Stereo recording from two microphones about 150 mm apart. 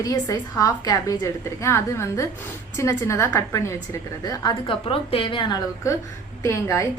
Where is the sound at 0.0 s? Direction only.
25° left (ahead or behind).